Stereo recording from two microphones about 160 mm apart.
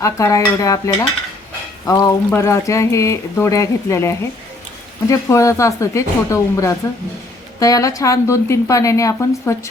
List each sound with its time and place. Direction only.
0.0 s speech: 20° left (ahead or behind)